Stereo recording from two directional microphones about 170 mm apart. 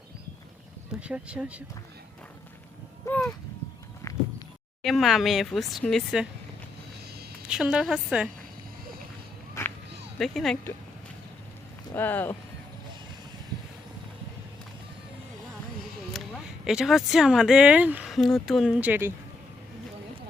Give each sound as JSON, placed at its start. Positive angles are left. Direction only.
{"t": 1.0, "sound": "speech", "side_deg": -5}
{"t": 3.1, "sound": "a sound", "side_deg": 5}
{"t": 4.0, "sound": "a sound", "side_deg": 20}
{"t": 4.8, "sound": "speech", "side_deg": 0}
{"t": 7.4, "sound": "speech", "side_deg": -5}
{"t": 10.2, "sound": "speech", "side_deg": 0}
{"t": 11.9, "sound": "speech", "side_deg": 10}
{"t": 16.1, "sound": "a sound", "side_deg": 0}
{"t": 16.6, "sound": "speech", "side_deg": 0}